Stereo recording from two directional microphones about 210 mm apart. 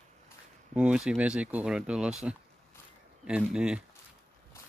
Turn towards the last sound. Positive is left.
turn(degrees=-5)  # may be behind; listen again after turning